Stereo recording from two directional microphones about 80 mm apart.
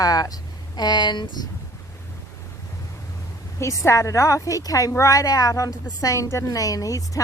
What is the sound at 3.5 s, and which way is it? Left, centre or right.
A woman's voice, left.